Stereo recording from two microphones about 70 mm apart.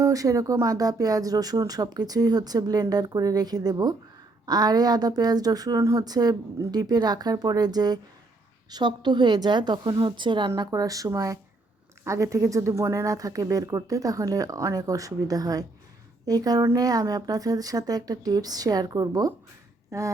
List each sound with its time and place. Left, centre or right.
0.0 s a woman's voice: right
8.7 s a woman's voice: right
10.6 s speech: right
19.9 s a sound: right